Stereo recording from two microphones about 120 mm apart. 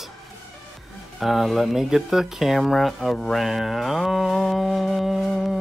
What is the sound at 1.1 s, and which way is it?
Speech, centre (ahead or behind).